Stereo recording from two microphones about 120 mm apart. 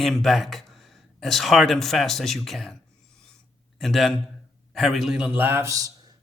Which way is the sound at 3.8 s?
Centre (ahead or behind).